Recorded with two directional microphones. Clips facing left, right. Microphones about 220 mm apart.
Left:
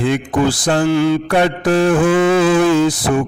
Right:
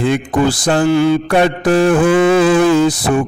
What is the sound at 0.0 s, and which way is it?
A man's voice, 45° right (ahead or behind).